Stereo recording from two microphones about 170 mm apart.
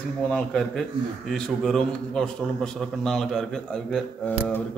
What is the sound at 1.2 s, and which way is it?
A man's voice, centre (ahead or behind).